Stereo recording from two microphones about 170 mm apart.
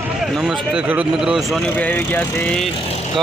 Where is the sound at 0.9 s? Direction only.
10° right (ahead or behind).